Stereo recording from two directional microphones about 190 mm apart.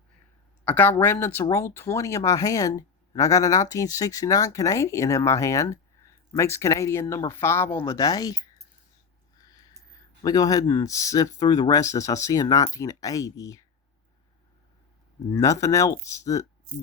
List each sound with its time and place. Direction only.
0.6 s speech: 10° left (ahead or behind)
9.4 s a sound: 20° left (ahead or behind)
9.9 s speech: 20° left (ahead or behind)
15.3 s speech: 15° left (ahead or behind)